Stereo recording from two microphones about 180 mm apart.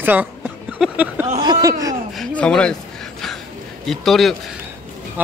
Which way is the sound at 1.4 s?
20° right (ahead or behind).